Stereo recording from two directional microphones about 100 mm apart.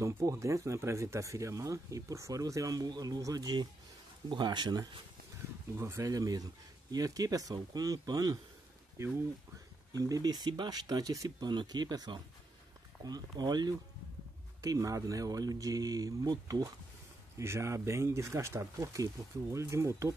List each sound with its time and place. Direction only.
0.0 s speech: 30° right (ahead or behind)
5.8 s speech: 30° right (ahead or behind)
9.9 s speech: 40° right (ahead or behind)
17.4 s speech: 30° right (ahead or behind)